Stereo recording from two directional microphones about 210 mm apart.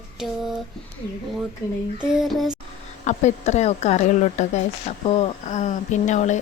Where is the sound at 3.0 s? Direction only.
35° left (ahead or behind).